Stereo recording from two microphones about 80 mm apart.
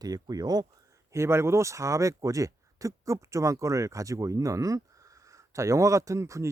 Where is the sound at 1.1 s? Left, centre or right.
Right.